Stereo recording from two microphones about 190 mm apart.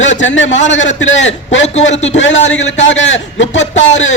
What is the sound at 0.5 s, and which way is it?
A man's voice, 75° left (ahead or behind).